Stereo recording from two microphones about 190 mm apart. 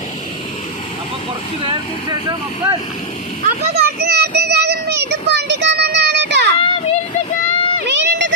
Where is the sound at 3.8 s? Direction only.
55° right (ahead or behind).